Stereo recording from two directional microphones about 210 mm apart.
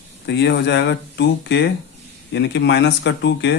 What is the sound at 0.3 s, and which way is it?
Speech, 55° left (ahead or behind).